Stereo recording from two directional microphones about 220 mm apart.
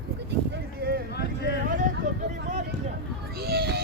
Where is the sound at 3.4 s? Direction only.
45° right (ahead or behind).